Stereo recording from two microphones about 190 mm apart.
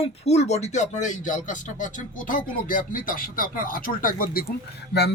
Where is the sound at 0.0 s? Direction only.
35° left (ahead or behind).